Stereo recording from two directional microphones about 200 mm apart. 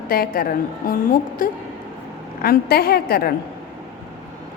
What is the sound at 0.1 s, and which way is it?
A woman's voice, 50° left (ahead or behind).